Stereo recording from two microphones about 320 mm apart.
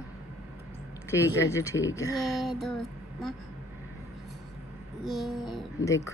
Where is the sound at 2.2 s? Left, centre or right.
Centre.